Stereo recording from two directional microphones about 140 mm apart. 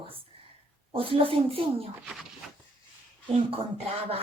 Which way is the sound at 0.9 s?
40° right (ahead or behind).